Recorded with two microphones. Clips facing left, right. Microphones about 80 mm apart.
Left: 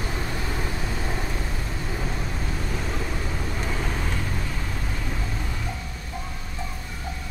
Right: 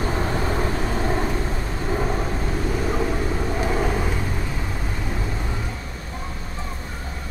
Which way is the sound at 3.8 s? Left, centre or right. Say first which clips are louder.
Right 6 dB; centre.